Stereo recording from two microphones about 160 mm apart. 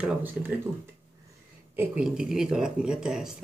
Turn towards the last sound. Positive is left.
turn(degrees=-5)  # may be behind; listen again after turning